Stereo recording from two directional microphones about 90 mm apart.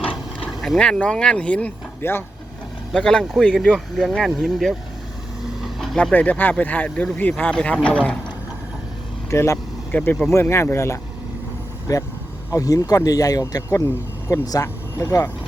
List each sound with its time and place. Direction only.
0.3 s speech: 5° left (ahead or behind)
2.0 s speech: 25° left (ahead or behind)
2.9 s speech: 5° left (ahead or behind)
5.6 s vehicle: centre (ahead or behind)
6.0 s speech: 15° left (ahead or behind)
9.3 s speech: 35° left (ahead or behind)
9.9 s speech: 20° left (ahead or behind)
12.5 s speech: 40° left (ahead or behind)